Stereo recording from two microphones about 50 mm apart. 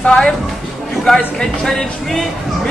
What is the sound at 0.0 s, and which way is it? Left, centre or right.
Speech, centre.